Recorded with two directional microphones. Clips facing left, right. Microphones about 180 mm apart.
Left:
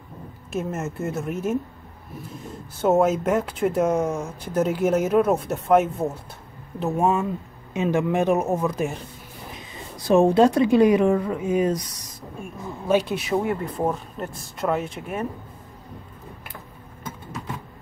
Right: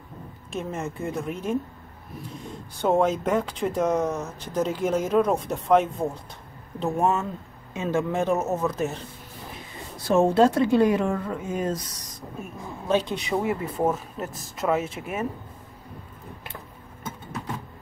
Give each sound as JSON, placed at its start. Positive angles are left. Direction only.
{"t": 0.5, "sound": "speech", "side_deg": 5}
{"t": 2.8, "sound": "speech", "side_deg": 5}
{"t": 10.0, "sound": "speech", "side_deg": 15}
{"t": 12.8, "sound": "speech", "side_deg": 10}